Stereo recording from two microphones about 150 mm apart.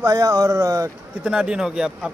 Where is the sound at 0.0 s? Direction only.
25° right (ahead or behind).